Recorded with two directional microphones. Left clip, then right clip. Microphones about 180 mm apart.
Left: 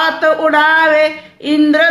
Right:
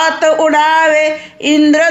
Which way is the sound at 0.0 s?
25° right (ahead or behind).